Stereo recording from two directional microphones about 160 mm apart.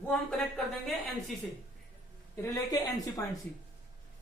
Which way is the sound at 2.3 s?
20° left (ahead or behind).